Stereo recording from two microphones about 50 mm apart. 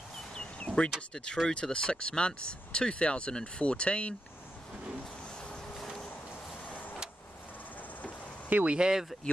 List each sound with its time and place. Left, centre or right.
0.3 s a sound: centre
1.1 s speech: centre
5.8 s vehicle: centre
8.5 s speech: right
8.7 s speech: centre